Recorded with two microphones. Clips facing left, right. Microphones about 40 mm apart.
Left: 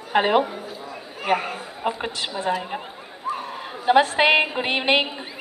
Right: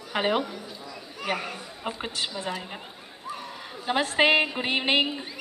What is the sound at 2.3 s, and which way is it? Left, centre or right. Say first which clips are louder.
Speech: left 8 dB; left.